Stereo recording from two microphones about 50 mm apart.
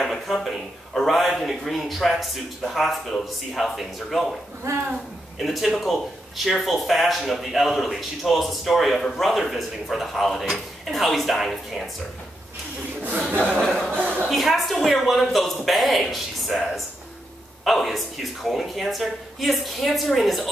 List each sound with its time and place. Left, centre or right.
0.0 s a man's voice: centre
5.4 s speech: centre
13.5 s speech: centre
13.9 s a sound: right
14.3 s speech: centre
17.6 s speech: centre